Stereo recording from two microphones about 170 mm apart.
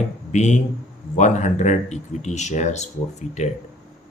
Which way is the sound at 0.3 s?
45° left (ahead or behind).